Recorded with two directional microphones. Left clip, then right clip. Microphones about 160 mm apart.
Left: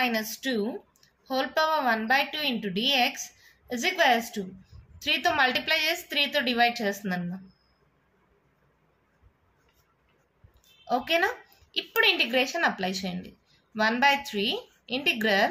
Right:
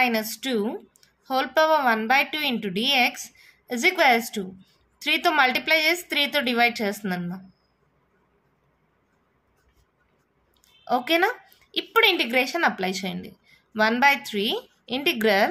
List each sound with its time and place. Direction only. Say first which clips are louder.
0.0 s a woman's voice: right 4 dB; 55° right (ahead or behind)
10.8 s speech: right 3 dB; 50° right (ahead or behind)